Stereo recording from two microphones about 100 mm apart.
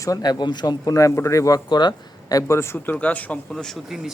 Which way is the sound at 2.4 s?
30° left (ahead or behind).